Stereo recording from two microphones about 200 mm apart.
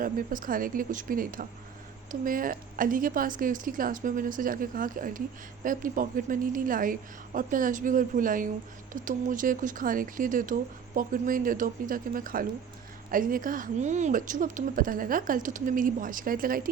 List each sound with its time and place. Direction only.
0.0 s speech: 45° right (ahead or behind)